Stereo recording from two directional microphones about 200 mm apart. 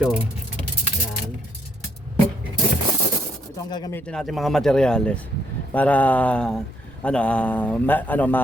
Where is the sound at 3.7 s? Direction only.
20° left (ahead or behind).